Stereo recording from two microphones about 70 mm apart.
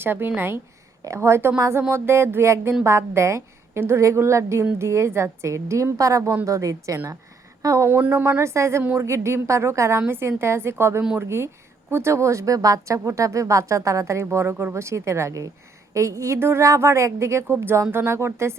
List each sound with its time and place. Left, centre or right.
0.0 s a woman's voice: right
1.0 s a woman's voice: right
1.9 s a woman's voice: right
7.9 s speech: right
8.1 s a woman's voice: right